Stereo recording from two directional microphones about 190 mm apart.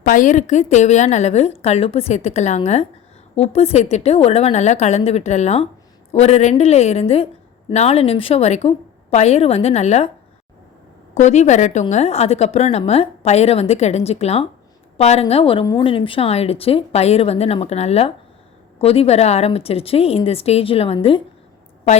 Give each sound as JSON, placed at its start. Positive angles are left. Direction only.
{"t": 0.0, "sound": "a woman's voice", "side_deg": 45}
{"t": 11.1, "sound": "a woman's voice", "side_deg": 35}